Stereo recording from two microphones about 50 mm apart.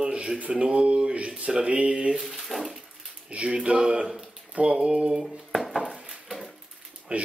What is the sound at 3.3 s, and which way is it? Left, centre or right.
Speech, right.